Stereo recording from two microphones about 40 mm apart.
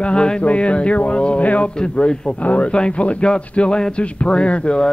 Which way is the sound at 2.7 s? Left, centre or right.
Left.